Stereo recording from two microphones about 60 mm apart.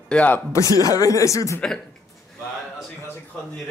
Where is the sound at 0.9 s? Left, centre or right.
Left.